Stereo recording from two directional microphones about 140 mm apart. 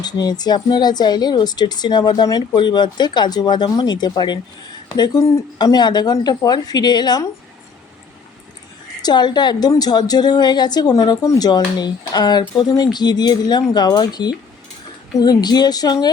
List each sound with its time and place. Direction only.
0.0 s a woman's voice: 30° left (ahead or behind)
9.0 s a woman's voice: 30° left (ahead or behind)